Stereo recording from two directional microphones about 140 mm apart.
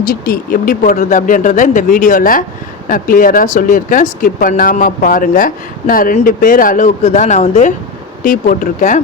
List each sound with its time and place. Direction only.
0.1 s speech: 90° left; by 2.4 s 75° left (ahead or behind)
2.9 s speech: 90° left; by 7.7 s 55° left (ahead or behind)
8.2 s speech: 70° left (ahead or behind)